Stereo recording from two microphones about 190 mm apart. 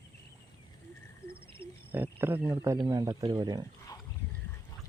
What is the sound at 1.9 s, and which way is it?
Speech, 10° right (ahead or behind).